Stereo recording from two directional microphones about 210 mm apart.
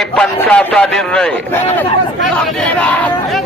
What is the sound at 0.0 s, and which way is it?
A man's voice, 5° left (ahead or behind).